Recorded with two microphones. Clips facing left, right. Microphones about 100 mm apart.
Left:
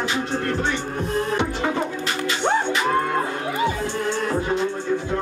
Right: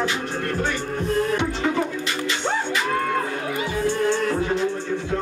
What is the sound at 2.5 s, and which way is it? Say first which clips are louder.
Music: left 4 dB; 25° left (ahead or behind).